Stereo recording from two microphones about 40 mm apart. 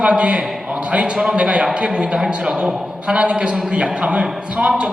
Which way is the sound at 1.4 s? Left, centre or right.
Right.